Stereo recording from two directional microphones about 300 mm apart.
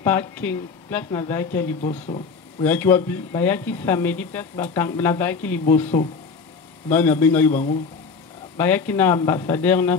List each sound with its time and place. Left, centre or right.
0.0 s speech: centre
1.9 s speech: left
2.6 s speech: centre
8.5 s speech: centre